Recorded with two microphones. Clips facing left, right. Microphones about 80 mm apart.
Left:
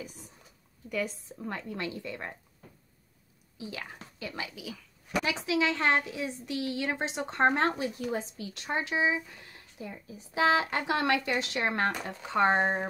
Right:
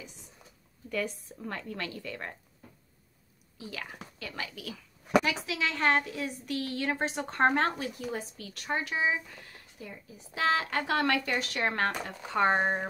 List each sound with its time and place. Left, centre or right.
0.8 s a woman's voice: centre
3.6 s a woman's voice: centre
5.2 s a woman's voice: left
12.4 s speech: centre